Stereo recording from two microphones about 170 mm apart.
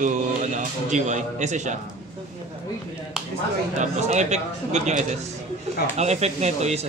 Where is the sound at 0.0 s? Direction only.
45° right (ahead or behind).